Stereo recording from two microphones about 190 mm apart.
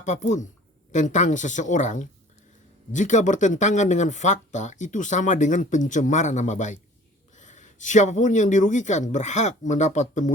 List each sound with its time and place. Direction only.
0.0 s speech: 40° left (ahead or behind)